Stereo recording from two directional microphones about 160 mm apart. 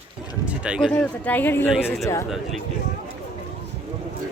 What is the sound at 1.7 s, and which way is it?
Speech, 5° right (ahead or behind).